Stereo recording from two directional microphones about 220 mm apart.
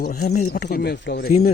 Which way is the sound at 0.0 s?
40° left (ahead or behind).